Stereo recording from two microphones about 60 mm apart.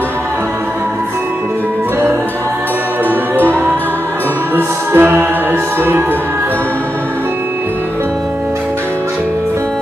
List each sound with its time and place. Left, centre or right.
4.6 s music: right